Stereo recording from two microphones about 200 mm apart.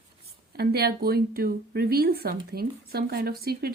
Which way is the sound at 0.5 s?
50° right (ahead or behind).